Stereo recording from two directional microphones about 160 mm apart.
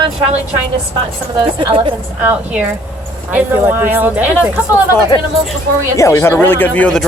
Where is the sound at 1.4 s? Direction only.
30° right (ahead or behind).